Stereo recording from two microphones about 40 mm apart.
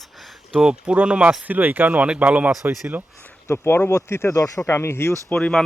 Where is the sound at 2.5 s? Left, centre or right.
Centre.